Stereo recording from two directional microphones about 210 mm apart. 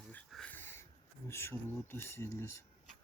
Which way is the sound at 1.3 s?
10° left (ahead or behind).